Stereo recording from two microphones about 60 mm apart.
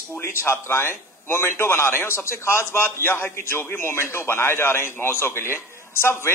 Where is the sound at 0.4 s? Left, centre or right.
Left.